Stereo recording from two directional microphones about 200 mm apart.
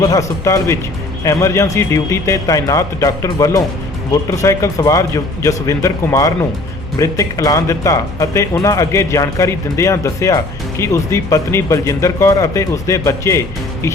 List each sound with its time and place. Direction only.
0.0 s speech: 15° left (ahead or behind)